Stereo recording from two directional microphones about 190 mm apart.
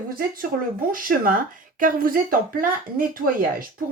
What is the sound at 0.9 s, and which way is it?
Speech, 50° right (ahead or behind).